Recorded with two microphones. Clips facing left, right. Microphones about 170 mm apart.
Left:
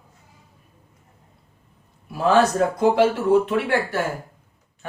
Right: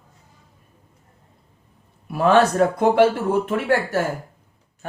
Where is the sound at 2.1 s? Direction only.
60° right (ahead or behind).